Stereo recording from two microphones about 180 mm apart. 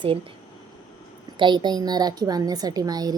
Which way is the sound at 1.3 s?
25° right (ahead or behind).